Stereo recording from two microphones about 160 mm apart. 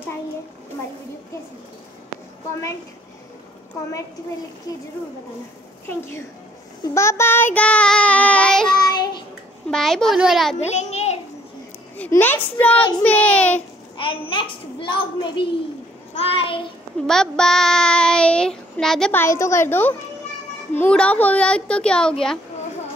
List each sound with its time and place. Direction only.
6.8 s child singing: 15° left (ahead or behind)
8.8 s child singing: 25° left (ahead or behind)
9.7 s child singing: 5° left (ahead or behind)
10.6 s a sound: 45° left (ahead or behind)
12.0 s a child's voice: 10° left (ahead or behind)
13.9 s a child's voice: 35° left (ahead or behind)
17.0 s child singing: 5° left (ahead or behind)
19.2 s a child's voice: 20° left (ahead or behind)